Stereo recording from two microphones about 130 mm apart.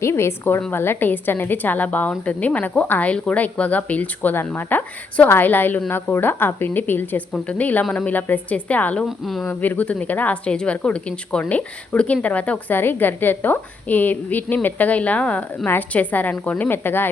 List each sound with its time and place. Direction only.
0.0 s a woman's voice: 20° left (ahead or behind)
9.0 s a woman's voice: centre (ahead or behind)
9.5 s speech: 15° left (ahead or behind)